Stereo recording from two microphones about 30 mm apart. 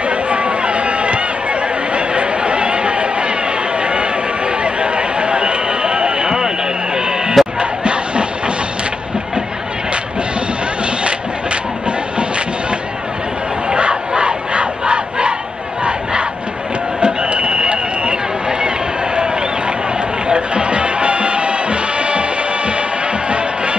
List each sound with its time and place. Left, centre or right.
0.1 s run: right
7.4 s music: centre
7.8 s a sound: right
13.7 s crowd: right
17.0 s run: right
20.2 s music: right
23.3 s music: right